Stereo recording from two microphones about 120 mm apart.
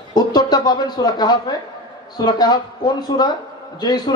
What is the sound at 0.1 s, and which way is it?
A woman's voice, 35° left (ahead or behind).